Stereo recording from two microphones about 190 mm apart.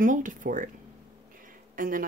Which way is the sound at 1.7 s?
45° right (ahead or behind).